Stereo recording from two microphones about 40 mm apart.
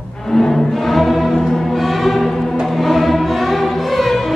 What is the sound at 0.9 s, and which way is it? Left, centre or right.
Music, centre.